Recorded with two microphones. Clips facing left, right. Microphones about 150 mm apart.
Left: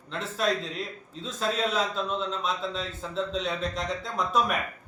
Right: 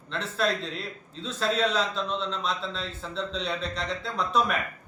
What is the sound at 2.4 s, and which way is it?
Speech, 45° left (ahead or behind).